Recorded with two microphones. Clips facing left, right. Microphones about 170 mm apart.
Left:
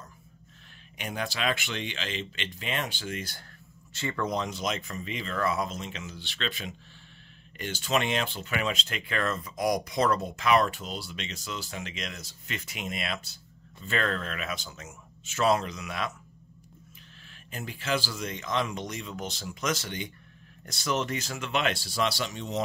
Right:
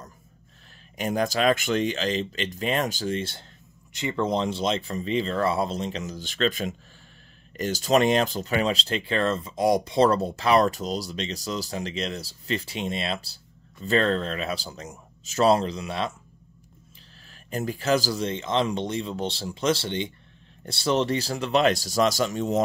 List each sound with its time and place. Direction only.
0.9 s speech: 40° right (ahead or behind)
3.9 s speech: 15° right (ahead or behind)
4.3 s speech: 30° right (ahead or behind)
17.5 s speech: 40° right (ahead or behind)